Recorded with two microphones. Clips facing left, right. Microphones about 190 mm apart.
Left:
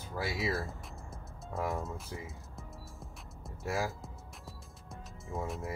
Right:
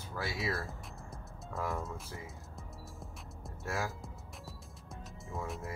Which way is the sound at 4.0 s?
Centre (ahead or behind).